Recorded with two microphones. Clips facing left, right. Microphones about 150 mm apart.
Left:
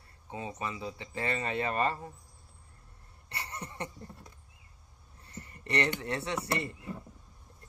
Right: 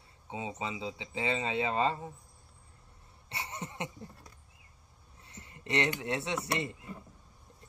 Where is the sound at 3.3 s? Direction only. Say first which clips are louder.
Right 1 dB; 20° right (ahead or behind).